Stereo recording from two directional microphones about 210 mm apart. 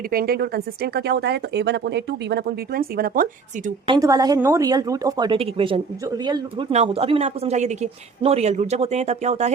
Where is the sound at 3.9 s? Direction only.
15° right (ahead or behind).